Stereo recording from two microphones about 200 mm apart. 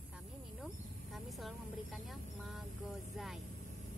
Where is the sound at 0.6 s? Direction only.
Centre (ahead or behind).